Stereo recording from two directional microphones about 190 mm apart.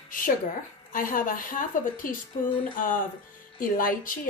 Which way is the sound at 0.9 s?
45° left (ahead or behind).